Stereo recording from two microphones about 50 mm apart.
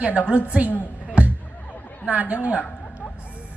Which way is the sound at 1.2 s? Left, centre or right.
Right.